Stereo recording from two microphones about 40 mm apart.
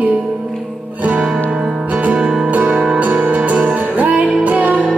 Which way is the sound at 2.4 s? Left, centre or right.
Right.